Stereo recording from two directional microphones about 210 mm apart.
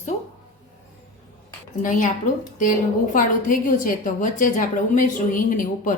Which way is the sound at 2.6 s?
40° left (ahead or behind).